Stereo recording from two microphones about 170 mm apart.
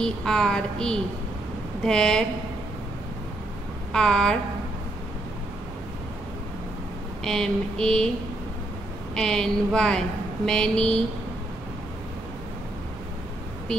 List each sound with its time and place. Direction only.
0.0 s a woman's voice: 5° left (ahead or behind)
3.9 s a woman's voice: 5° left (ahead or behind)
7.2 s a woman's voice: 5° left (ahead or behind)
9.1 s a woman's voice: 5° left (ahead or behind)